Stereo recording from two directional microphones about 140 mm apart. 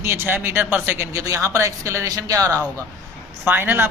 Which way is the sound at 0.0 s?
15° right (ahead or behind).